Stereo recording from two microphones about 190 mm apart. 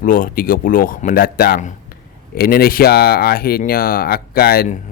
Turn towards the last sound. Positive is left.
turn(degrees=55)  # may be behind; listen again after turning